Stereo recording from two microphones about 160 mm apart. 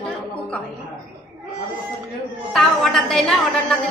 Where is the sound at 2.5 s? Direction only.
5° left (ahead or behind).